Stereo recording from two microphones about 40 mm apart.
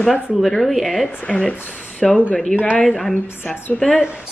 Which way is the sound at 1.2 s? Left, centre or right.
Left.